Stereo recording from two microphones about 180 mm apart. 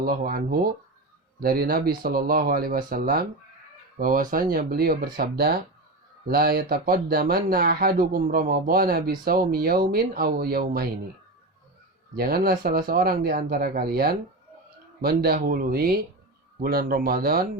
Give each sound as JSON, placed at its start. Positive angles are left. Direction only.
{"t": 0.0, "sound": "speech", "side_deg": -55}
{"t": 12.1, "sound": "speech", "side_deg": -55}